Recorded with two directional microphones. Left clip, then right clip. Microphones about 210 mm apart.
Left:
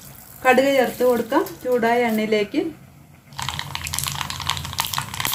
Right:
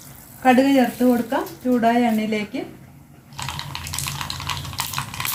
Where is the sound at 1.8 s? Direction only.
50° left (ahead or behind).